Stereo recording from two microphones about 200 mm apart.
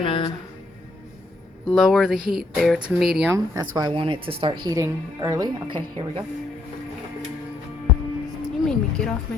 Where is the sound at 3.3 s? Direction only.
20° right (ahead or behind).